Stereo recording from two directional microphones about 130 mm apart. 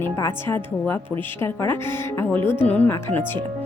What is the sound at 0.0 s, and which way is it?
A woman's voice, 15° left (ahead or behind).